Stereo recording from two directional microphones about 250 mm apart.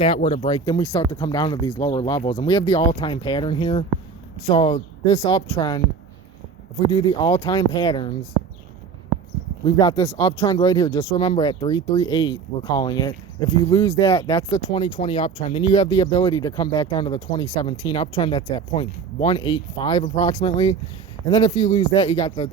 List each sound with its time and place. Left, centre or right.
0.0 s speech: left
9.6 s speech: centre